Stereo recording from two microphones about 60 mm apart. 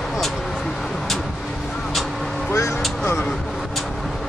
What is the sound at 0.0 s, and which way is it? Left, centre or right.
Vehicle, centre.